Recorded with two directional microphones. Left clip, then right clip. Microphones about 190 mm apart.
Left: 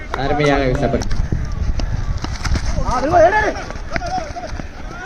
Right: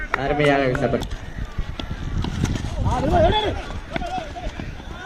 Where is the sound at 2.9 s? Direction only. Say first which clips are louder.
Left 6 dB; centre (ahead or behind).